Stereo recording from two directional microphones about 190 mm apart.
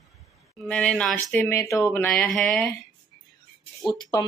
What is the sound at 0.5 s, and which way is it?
A woman's voice, 5° left (ahead or behind).